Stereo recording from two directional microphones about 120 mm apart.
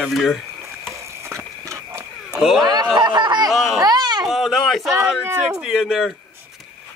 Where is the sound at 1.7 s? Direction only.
25° right (ahead or behind).